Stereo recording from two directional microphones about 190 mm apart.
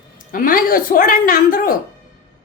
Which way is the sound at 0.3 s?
45° left (ahead or behind).